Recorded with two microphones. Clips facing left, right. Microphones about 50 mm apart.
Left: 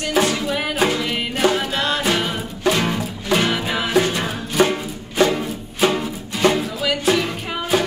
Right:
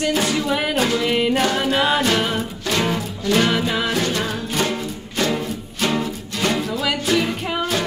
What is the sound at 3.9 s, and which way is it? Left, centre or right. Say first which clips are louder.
Music: left 3 dB; centre.